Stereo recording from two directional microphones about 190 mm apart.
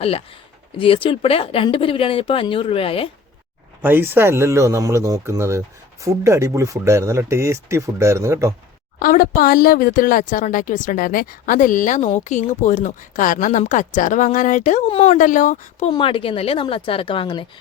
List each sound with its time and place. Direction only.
0.0 s speech: 30° left (ahead or behind)
3.8 s speech: 10° right (ahead or behind)
9.0 s speech: 45° left (ahead or behind)
15.9 s speech: 25° left (ahead or behind)